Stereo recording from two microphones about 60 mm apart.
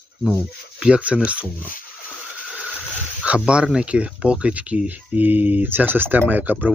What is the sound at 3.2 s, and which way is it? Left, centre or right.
Speech, centre.